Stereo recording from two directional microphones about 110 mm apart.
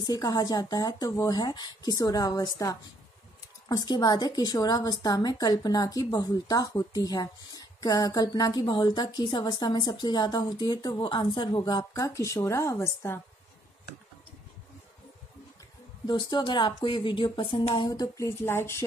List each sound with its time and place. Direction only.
0.0 s a woman's voice: 35° left (ahead or behind)
16.1 s a woman's voice: 45° left (ahead or behind); by 18.9 s 25° left (ahead or behind)